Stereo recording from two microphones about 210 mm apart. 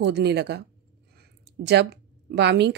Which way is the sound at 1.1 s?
55° right (ahead or behind).